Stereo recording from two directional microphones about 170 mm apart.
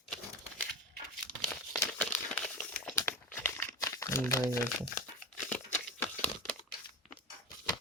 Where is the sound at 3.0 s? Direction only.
15° left (ahead or behind).